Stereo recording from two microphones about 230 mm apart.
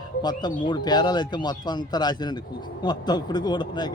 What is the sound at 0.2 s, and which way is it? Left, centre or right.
Speech, centre.